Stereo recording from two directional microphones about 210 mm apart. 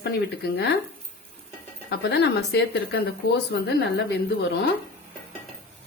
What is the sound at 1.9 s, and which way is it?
Speech, 55° left (ahead or behind).